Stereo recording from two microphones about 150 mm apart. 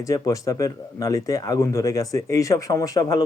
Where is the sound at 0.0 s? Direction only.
20° left (ahead or behind).